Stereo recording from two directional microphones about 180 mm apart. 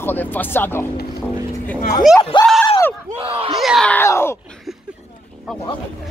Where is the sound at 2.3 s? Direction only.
25° left (ahead or behind).